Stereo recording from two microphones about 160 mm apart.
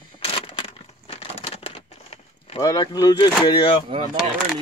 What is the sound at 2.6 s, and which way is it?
Speech, 20° left (ahead or behind).